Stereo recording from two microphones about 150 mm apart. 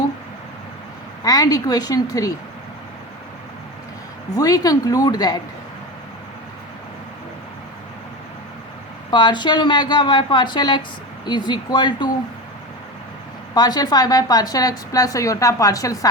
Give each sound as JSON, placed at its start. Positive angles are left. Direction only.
{"t": 1.2, "sound": "a woman's voice", "side_deg": 25}
{"t": 4.4, "sound": "a woman's voice", "side_deg": 25}
{"t": 9.0, "sound": "a woman's voice", "side_deg": 30}
{"t": 13.5, "sound": "a woman's voice", "side_deg": 25}